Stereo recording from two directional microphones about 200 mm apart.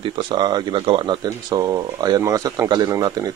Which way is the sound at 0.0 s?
25° right (ahead or behind).